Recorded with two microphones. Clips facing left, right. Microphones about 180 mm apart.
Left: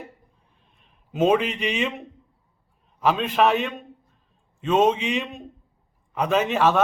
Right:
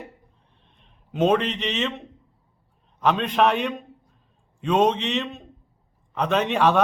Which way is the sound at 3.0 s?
5° left (ahead or behind).